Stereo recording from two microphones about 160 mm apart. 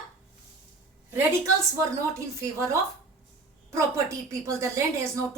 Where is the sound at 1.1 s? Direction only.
15° right (ahead or behind).